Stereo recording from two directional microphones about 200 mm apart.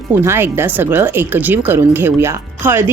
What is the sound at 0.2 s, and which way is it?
Speech, 10° right (ahead or behind).